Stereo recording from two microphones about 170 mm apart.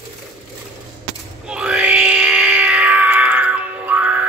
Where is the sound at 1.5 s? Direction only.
5° right (ahead or behind).